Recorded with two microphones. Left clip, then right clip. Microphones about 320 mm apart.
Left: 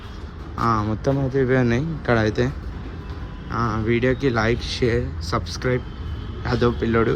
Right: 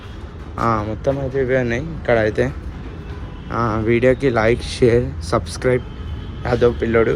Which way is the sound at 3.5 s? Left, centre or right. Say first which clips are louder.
Right 4 dB; centre.